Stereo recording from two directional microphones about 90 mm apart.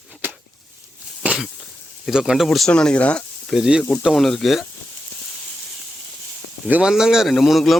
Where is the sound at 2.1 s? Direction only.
5° right (ahead or behind).